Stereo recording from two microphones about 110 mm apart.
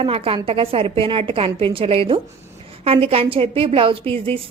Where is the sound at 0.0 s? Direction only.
60° right (ahead or behind).